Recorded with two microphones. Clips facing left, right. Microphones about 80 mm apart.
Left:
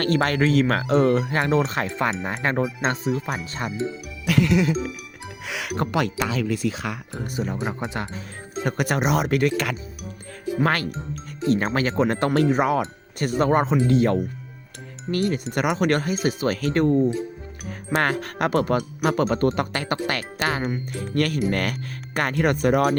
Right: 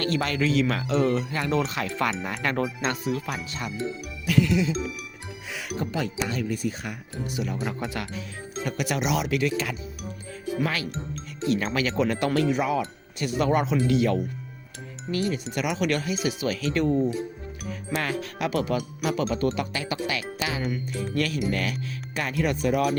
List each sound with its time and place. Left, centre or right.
0.0 s speech: left
3.2 s speech: left
4.3 s speech: left
5.5 s speech: left
7.3 s speech: left
8.6 s speech: left
11.4 s speech: left
15.1 s speech: left